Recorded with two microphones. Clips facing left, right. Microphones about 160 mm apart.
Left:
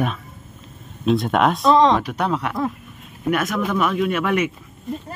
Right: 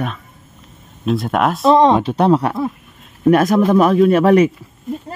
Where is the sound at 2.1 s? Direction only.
35° right (ahead or behind).